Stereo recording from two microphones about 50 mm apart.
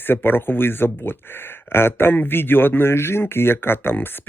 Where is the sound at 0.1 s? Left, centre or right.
Left.